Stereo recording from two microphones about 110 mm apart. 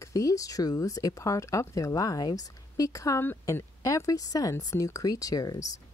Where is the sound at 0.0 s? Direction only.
30° left (ahead or behind).